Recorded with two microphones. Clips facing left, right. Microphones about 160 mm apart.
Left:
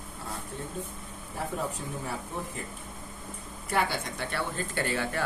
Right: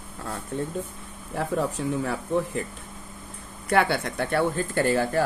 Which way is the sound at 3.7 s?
65° right (ahead or behind).